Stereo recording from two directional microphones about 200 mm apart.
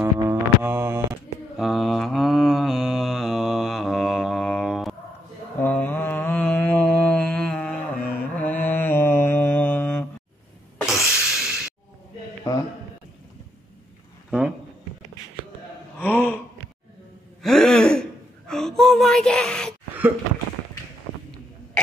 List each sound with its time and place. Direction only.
0.0 s mantra: 10° right (ahead or behind)
1.6 s mantra: centre (ahead or behind)
5.6 s mantra: 10° left (ahead or behind)
11.1 s snort: 5° right (ahead or behind)
12.5 s a sound: 15° left (ahead or behind)
16.0 s gasp: 10° left (ahead or behind)
17.4 s gasp: centre (ahead or behind)
18.5 s a sound: centre (ahead or behind)